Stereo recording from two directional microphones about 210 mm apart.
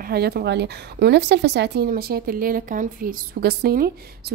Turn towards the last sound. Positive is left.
turn(degrees=-45)  # may be behind; listen again after turning